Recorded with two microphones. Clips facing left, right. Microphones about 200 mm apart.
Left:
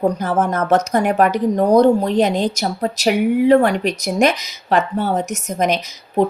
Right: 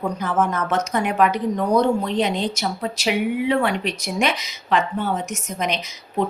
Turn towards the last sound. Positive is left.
turn(degrees=45)  # may be behind; listen again after turning